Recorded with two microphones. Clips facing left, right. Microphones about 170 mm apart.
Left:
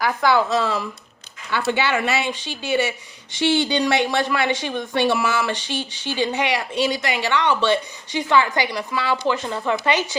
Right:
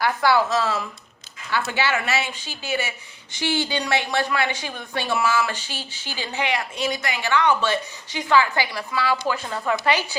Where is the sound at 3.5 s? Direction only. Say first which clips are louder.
Left 3 dB; 20° left (ahead or behind).